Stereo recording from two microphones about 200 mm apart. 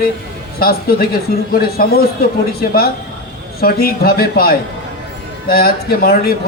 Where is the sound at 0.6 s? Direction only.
50° left (ahead or behind).